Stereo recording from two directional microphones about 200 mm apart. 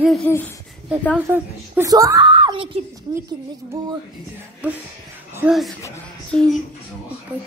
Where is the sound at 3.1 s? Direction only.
15° right (ahead or behind).